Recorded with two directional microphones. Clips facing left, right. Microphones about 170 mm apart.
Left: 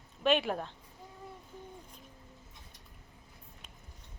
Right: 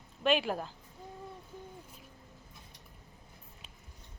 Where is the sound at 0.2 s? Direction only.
Centre (ahead or behind).